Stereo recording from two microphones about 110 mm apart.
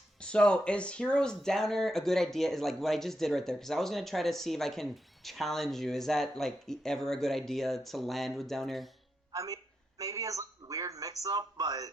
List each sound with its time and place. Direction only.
0.2 s speech: 10° left (ahead or behind)
9.3 s a man's voice: 30° right (ahead or behind)